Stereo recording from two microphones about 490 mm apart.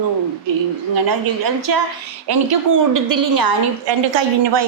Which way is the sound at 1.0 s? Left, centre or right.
Right.